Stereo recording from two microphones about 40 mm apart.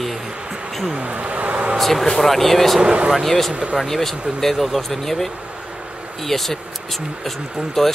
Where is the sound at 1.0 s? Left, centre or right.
Right.